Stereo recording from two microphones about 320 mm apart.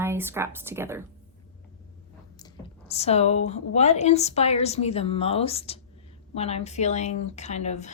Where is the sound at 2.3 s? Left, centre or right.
Centre.